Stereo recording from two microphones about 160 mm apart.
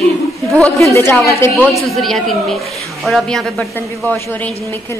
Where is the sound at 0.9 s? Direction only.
15° left (ahead or behind).